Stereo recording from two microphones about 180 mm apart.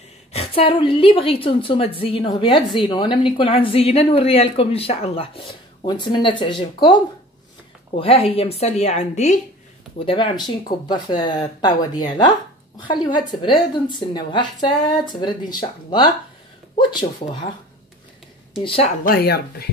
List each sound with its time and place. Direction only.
0.3 s speech: 35° left (ahead or behind)
9.9 s a woman's voice: 30° left (ahead or behind)
16.7 s a woman's voice: 25° left (ahead or behind)
18.6 s a woman's voice: 30° left (ahead or behind)
19.0 s speech: 60° left (ahead or behind)